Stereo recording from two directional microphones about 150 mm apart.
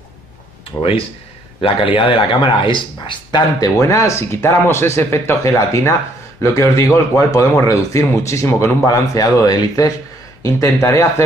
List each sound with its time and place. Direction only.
0.7 s speech: 15° left (ahead or behind)
1.6 s a man's voice: 35° left (ahead or behind); by 11.2 s 20° left (ahead or behind)